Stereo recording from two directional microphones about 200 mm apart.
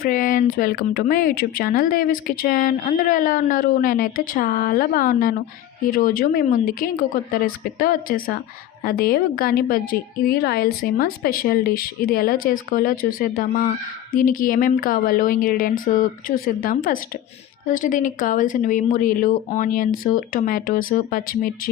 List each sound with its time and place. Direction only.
0.0 s speech: 45° left (ahead or behind)